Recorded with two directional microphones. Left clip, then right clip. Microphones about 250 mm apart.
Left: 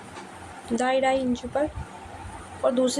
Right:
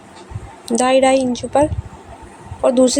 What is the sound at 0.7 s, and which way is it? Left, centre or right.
A woman's voice, right.